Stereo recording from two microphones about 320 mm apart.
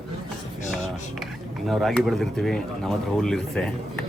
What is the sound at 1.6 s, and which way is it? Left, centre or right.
Speech, centre.